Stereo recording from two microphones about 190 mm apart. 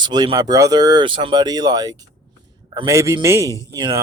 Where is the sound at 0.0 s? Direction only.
20° right (ahead or behind).